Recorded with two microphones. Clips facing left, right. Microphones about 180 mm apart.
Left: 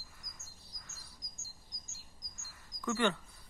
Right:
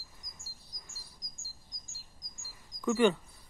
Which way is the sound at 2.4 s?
15° right (ahead or behind).